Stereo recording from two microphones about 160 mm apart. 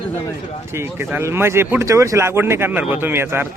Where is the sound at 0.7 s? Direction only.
15° right (ahead or behind).